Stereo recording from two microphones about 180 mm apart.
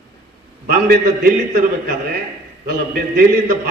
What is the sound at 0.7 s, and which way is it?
A man's voice, 55° right (ahead or behind).